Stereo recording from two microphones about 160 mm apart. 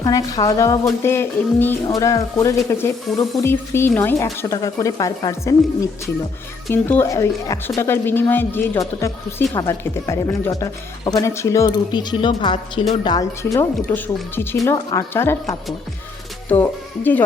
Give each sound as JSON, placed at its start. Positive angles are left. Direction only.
{"t": 0.0, "sound": "a woman's voice", "side_deg": 20}